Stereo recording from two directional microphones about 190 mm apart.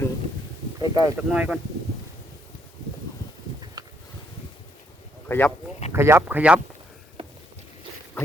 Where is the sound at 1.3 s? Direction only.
5° right (ahead or behind).